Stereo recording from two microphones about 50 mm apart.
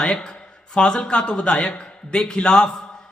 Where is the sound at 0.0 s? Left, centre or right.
Centre.